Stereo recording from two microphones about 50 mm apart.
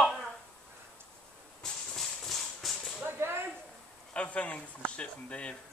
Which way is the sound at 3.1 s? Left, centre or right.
Right.